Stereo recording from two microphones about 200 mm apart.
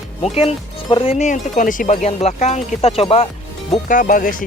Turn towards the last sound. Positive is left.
turn(degrees=45)  # may be behind; listen again after turning